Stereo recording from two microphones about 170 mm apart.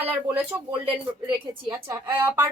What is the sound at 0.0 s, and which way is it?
Speech, 10° right (ahead or behind).